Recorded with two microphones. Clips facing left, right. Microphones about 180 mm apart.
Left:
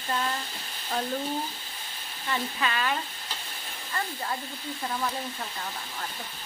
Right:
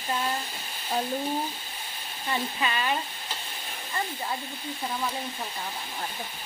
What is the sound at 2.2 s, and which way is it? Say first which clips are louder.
Speech: right 1 dB; 20° right (ahead or behind).